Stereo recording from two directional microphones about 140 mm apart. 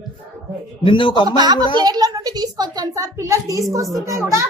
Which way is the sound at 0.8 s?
35° left (ahead or behind).